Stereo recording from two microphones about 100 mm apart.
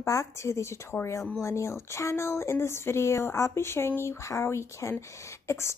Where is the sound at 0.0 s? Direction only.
30° left (ahead or behind).